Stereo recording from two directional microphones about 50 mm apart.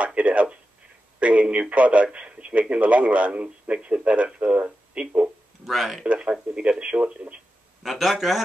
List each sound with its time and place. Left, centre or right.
0.0 s speech: right
5.7 s speech: centre
6.0 s speech: right
7.8 s speech: centre